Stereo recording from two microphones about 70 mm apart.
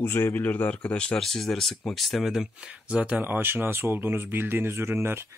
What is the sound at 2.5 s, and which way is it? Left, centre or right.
Speech, centre.